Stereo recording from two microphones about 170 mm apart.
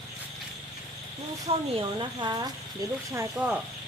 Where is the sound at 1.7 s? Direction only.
25° right (ahead or behind).